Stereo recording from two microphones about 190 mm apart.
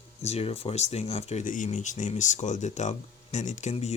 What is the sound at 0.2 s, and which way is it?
Speech, 35° left (ahead or behind).